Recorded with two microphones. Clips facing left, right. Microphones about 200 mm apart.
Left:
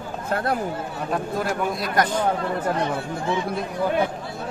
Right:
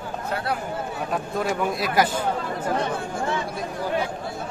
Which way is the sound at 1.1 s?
Centre (ahead or behind).